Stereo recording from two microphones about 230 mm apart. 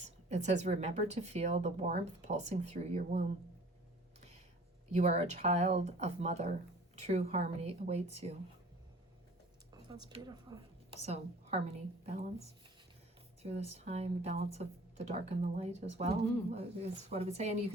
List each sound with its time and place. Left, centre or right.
0.0 s speech: right
4.9 s speech: right
9.9 s a woman's voice: centre
11.0 s a woman's voice: right
13.4 s speech: right